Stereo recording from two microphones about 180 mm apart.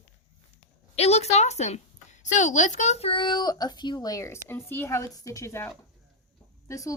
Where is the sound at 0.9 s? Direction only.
35° left (ahead or behind).